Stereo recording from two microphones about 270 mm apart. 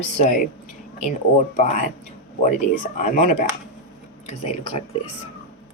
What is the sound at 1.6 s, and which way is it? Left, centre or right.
Speech, left.